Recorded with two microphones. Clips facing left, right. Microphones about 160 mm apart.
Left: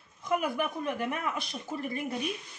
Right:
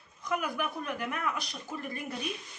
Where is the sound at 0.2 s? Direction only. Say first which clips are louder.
Left 3 dB; 25° left (ahead or behind).